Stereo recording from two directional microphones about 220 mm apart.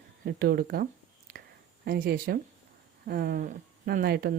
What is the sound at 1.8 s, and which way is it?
Speech, 40° right (ahead or behind).